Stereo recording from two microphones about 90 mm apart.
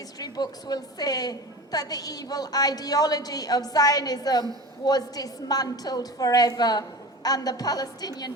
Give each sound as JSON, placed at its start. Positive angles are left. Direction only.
{"t": 0.2, "sound": "a woman's voice", "side_deg": 45}